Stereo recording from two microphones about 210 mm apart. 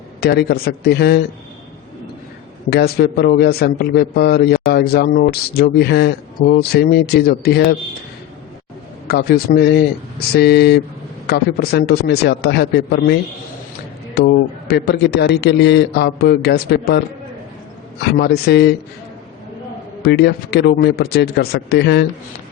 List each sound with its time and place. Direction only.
0.2 s speech: 50° left (ahead or behind)
2.6 s speech: 50° left (ahead or behind)
9.0 s speech: 50° left (ahead or behind)
14.2 s speech: 50° left (ahead or behind)
18.0 s speech: 50° left (ahead or behind)
20.0 s speech: 50° left (ahead or behind)